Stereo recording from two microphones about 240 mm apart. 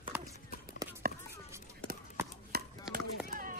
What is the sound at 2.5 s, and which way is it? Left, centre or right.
Chopping, right.